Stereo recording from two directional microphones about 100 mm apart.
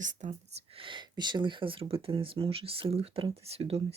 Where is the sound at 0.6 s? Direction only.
60° right (ahead or behind).